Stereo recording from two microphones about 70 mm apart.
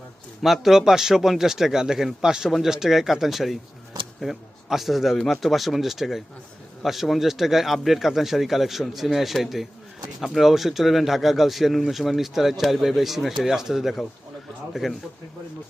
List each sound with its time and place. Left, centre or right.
0.4 s speech: centre